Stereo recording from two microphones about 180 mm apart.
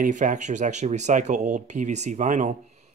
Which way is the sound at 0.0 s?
45° right (ahead or behind).